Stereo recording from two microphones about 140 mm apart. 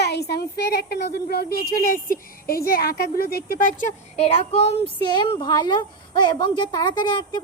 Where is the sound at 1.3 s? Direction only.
90° left; by 4.2 s 70° left (ahead or behind).